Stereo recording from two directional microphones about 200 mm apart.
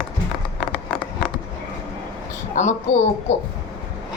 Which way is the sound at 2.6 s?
35° left (ahead or behind).